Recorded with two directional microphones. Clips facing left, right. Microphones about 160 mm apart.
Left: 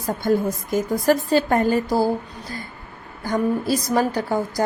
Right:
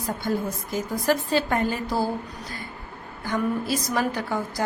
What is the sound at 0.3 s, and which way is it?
A woman's voice, 45° left (ahead or behind).